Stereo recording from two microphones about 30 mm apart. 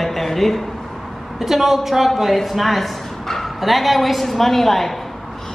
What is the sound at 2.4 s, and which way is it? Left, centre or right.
Speech, centre.